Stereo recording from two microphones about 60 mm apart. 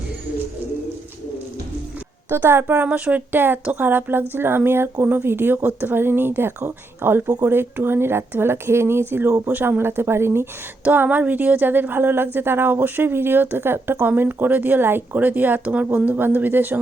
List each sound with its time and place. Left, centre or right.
2.3 s speech: right
2.9 s speech: right
10.8 s speech: right
13.9 s speech: right